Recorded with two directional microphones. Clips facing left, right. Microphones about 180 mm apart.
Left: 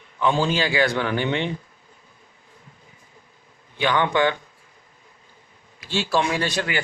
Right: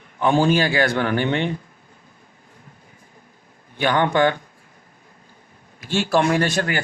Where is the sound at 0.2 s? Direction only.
50° right (ahead or behind).